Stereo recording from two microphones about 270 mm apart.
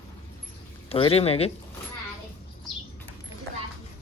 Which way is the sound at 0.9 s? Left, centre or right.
Left.